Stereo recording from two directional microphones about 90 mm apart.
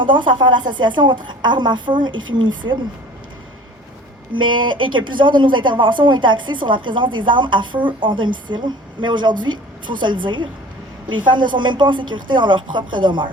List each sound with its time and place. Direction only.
0.0 s speech: 65° right (ahead or behind)
4.4 s speech: 65° right (ahead or behind)